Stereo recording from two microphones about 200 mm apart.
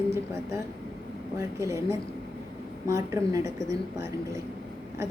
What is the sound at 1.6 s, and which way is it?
Speech, 15° right (ahead or behind).